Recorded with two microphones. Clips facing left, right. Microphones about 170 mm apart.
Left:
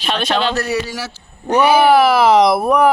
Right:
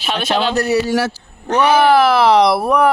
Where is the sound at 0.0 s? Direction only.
5° right (ahead or behind).